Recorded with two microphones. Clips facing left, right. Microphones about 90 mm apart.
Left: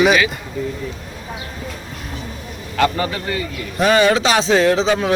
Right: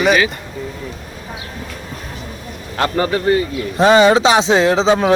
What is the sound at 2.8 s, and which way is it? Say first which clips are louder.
A man's voice: right 2 dB; 35° right (ahead or behind).